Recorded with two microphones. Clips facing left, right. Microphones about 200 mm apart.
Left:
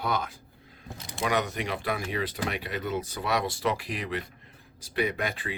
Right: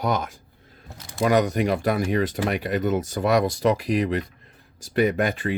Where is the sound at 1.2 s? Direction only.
40° right (ahead or behind).